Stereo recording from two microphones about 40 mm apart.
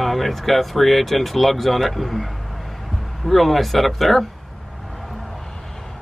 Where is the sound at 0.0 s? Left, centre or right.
Centre.